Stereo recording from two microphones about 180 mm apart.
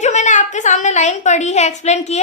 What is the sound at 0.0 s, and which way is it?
A woman's voice, 40° left (ahead or behind).